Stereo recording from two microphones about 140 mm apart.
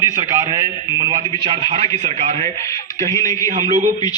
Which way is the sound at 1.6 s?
45° right (ahead or behind).